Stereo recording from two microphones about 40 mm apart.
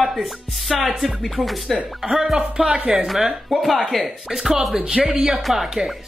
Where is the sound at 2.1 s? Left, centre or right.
Centre.